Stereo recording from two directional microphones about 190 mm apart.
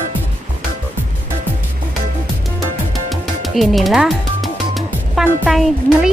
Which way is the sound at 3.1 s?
Centre (ahead or behind).